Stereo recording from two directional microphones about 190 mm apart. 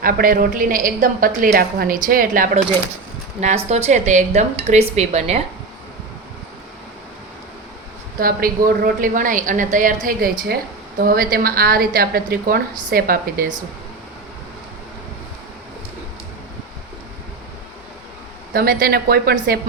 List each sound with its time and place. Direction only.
0.0 s a woman's voice: 50° right (ahead or behind)
3.4 s a woman's voice: 35° right (ahead or behind)
8.2 s a woman's voice: 50° right (ahead or behind)
18.5 s a woman's voice: 55° right (ahead or behind)